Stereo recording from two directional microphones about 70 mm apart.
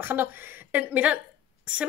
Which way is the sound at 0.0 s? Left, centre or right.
Right.